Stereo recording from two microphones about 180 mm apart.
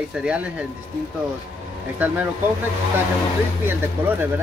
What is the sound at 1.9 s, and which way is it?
Speech, 10° right (ahead or behind).